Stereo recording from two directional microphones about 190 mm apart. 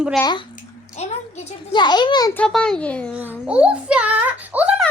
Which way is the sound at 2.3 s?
5° left (ahead or behind).